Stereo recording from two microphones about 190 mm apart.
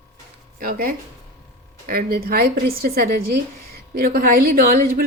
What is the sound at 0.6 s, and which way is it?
A woman's voice, 50° right (ahead or behind).